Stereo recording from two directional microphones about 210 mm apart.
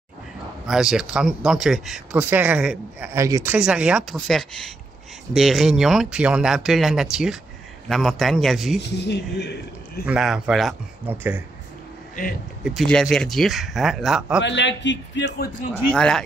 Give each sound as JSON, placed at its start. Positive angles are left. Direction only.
{"t": 0.7, "sound": "speech", "side_deg": 0}
{"t": 8.8, "sound": "a man's voice", "side_deg": 55}
{"t": 10.0, "sound": "speech", "side_deg": -5}
{"t": 12.6, "sound": "speech", "side_deg": 0}
{"t": 14.4, "sound": "a man's voice", "side_deg": 55}
{"t": 15.9, "sound": "speech", "side_deg": 5}